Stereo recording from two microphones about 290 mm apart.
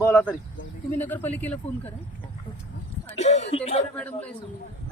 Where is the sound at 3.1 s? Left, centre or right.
Left.